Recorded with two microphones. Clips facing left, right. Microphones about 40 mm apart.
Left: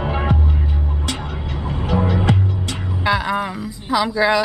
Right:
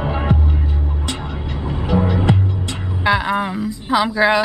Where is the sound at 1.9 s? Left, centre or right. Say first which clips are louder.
Right 1 dB; centre.